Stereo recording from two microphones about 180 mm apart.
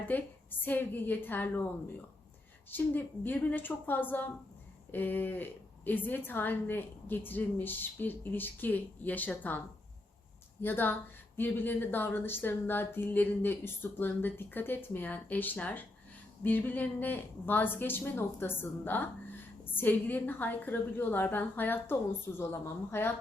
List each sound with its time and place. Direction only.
0.0 s a woman's voice: 10° left (ahead or behind)
2.6 s a woman's voice: 10° left (ahead or behind)
10.6 s a woman's voice: 10° left (ahead or behind)